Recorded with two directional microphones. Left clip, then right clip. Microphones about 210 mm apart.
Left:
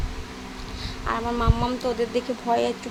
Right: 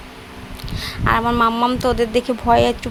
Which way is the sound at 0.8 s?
35° right (ahead or behind).